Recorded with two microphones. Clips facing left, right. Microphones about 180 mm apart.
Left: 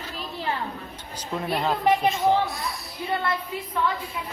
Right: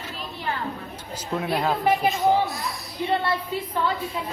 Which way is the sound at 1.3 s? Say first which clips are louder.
Right 1 dB; centre (ahead or behind).